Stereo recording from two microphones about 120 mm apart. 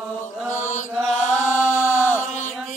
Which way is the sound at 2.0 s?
20° left (ahead or behind).